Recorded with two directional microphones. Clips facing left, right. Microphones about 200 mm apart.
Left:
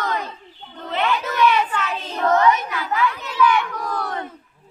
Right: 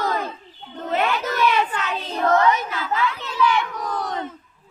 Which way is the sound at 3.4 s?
20° right (ahead or behind).